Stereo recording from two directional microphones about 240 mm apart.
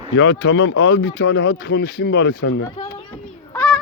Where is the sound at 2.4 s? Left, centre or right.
Left.